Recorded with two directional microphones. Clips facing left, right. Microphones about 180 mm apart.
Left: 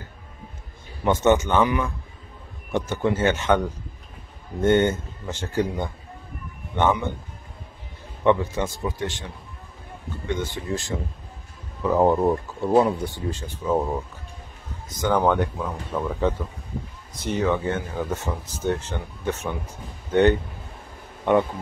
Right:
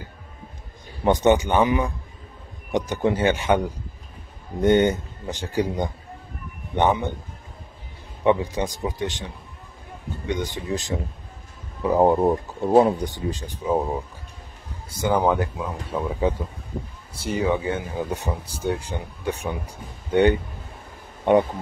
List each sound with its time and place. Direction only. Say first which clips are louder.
1.0 s speech: right 1 dB; 15° right (ahead or behind)
8.2 s speech: even; 15° right (ahead or behind)
10.5 s speech: right 1 dB; 20° right (ahead or behind)